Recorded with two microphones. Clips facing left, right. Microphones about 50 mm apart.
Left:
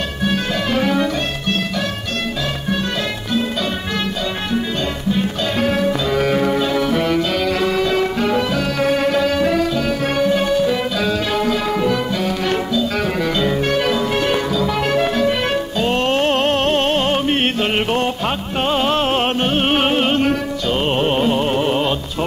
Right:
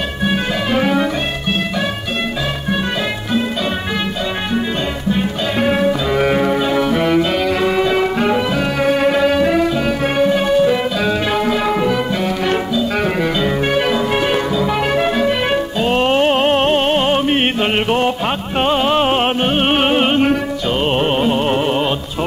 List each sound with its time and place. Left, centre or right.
0.2 s music: centre
5.1 s music: centre
20.8 s carnatic music: centre